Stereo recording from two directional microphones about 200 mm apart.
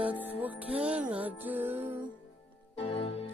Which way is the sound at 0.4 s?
5° right (ahead or behind).